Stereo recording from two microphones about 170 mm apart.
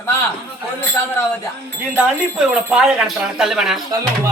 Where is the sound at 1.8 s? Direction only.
10° right (ahead or behind).